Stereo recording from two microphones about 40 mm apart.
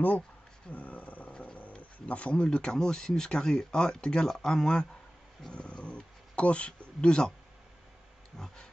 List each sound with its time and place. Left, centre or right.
0.7 s roaring cats: left
1.3 s dog: left
1.8 s speech: left; by 4.6 s centre
5.5 s a sound: left